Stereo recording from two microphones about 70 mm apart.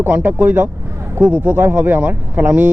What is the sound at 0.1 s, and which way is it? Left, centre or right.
Speech, right.